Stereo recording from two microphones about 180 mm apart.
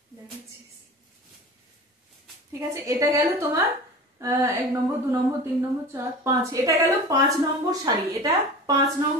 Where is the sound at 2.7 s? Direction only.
15° right (ahead or behind).